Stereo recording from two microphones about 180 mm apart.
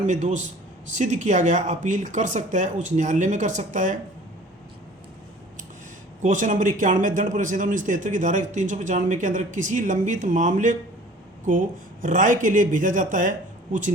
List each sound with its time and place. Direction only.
0.0 s a man's voice: 40° right (ahead or behind)
6.2 s a man's voice: 45° right (ahead or behind)
12.0 s a man's voice: 45° right (ahead or behind)